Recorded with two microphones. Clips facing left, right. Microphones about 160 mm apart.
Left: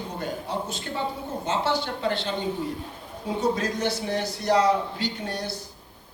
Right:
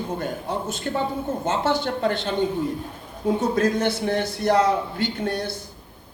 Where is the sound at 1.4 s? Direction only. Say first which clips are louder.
Right 2 dB; 50° right (ahead or behind).